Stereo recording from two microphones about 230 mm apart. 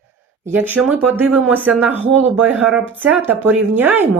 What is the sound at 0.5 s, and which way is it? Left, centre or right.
Speech, centre.